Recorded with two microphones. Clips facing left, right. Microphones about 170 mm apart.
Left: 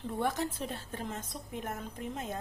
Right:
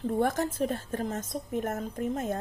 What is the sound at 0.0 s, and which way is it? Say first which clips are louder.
A woman's voice: right 6 dB; 45° right (ahead or behind).